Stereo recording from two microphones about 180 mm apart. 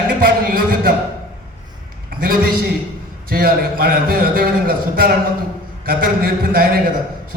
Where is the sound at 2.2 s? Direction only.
55° right (ahead or behind).